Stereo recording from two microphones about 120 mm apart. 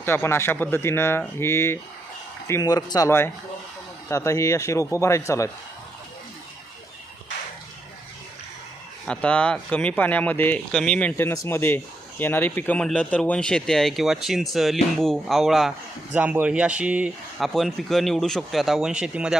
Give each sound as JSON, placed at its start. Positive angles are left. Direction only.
{"t": 0.0, "sound": "speech", "side_deg": 20}
{"t": 9.0, "sound": "speech", "side_deg": 10}
{"t": 11.2, "sound": "speech", "side_deg": 20}
{"t": 16.1, "sound": "speech", "side_deg": -15}
{"t": 17.4, "sound": "speech", "side_deg": 0}